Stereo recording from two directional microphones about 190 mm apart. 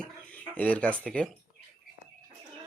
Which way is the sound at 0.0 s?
5° left (ahead or behind).